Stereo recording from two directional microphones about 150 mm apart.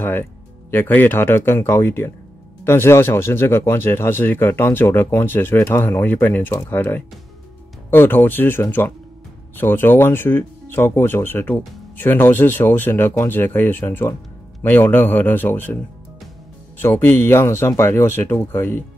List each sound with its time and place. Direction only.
0.0 s speech: 15° left (ahead or behind)
16.8 s speech: 15° left (ahead or behind)